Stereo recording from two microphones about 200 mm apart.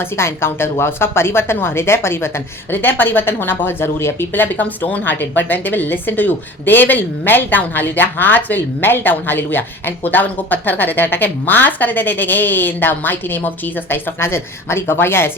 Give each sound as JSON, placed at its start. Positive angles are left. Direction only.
{"t": 0.0, "sound": "speech", "side_deg": 10}